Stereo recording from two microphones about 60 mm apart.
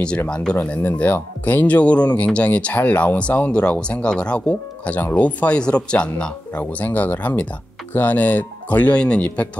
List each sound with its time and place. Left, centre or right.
0.3 s speech: centre